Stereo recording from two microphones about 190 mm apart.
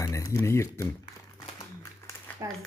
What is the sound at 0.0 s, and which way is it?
Speech, 15° left (ahead or behind).